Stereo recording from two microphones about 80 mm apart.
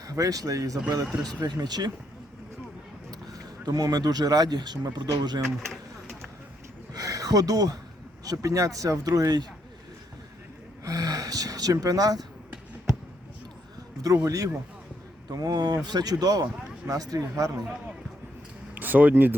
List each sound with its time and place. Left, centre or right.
0.1 s speech: right
1.4 s speech: right
3.1 s speech: right
5.5 s a sound: centre
6.9 s a sound: right
8.2 s speech: right
10.8 s gasp: right
14.3 s speech: right
18.7 s speech: right